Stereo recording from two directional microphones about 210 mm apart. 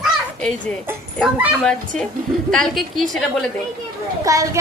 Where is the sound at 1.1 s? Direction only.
Centre (ahead or behind).